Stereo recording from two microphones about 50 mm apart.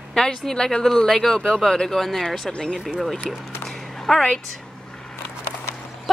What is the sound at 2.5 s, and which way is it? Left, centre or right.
Speech, centre.